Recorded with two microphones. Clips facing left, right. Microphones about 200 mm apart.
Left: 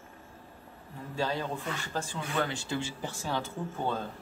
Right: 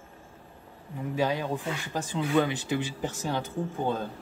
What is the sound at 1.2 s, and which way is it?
Speech, 15° right (ahead or behind).